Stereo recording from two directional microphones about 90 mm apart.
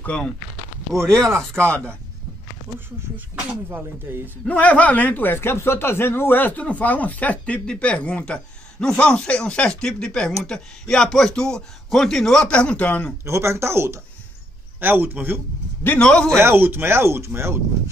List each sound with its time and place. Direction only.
0.0 s speech: 15° left (ahead or behind)
1.1 s speech: 30° right (ahead or behind)
4.1 s speech: 25° right (ahead or behind)
4.5 s speech: 15° left (ahead or behind)
13.2 s speech: 30° right (ahead or behind)
16.0 s speech: 10° left (ahead or behind)
16.3 s speech: 25° right (ahead or behind)